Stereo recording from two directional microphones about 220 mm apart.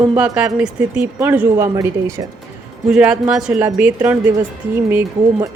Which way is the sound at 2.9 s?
5° right (ahead or behind).